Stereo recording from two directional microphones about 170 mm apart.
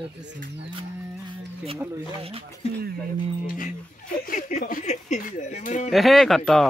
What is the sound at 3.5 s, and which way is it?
Speech, 50° left (ahead or behind).